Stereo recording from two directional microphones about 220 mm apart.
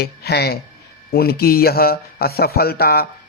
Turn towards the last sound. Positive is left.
turn(degrees=45)  # may be behind; listen again after turning